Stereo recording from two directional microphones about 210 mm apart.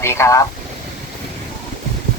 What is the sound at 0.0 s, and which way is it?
Speech, 10° left (ahead or behind).